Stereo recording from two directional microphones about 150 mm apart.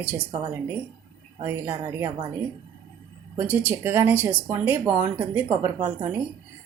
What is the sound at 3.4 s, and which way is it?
Speech, 15° right (ahead or behind).